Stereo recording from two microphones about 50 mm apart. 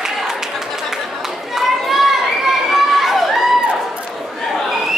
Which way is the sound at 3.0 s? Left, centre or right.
Centre.